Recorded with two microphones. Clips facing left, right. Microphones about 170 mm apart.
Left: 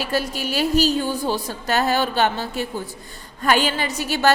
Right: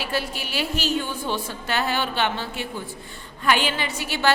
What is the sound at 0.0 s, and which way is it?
A woman's voice, 40° left (ahead or behind).